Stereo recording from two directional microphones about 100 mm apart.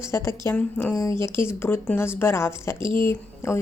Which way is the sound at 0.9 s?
30° left (ahead or behind).